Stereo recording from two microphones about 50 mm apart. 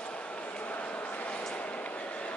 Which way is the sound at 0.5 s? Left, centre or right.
Left.